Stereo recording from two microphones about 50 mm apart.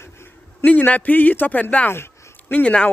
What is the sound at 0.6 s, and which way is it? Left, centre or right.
Speech, left.